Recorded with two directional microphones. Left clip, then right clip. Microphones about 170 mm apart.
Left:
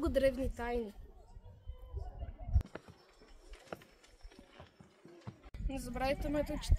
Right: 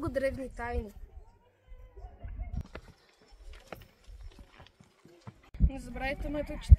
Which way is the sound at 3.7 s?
65° right (ahead or behind).